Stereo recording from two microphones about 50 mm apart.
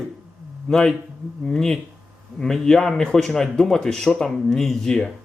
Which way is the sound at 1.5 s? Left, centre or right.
Centre.